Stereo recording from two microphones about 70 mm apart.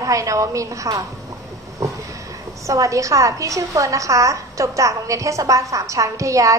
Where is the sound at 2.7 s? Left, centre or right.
Right.